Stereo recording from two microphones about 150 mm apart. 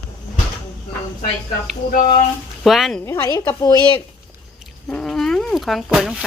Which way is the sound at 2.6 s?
Centre (ahead or behind).